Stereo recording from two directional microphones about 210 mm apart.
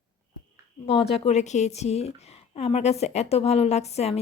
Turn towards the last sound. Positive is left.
turn(degrees=30)  # may be behind; listen again after turning